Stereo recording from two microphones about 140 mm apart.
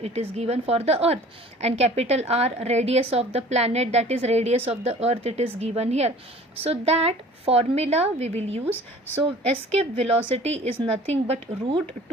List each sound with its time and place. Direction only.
0.0 s a woman's voice: 50° right (ahead or behind)